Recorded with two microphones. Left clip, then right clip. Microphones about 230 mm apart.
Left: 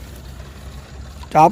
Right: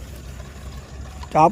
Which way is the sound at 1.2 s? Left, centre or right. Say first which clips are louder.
Left 3 dB; centre.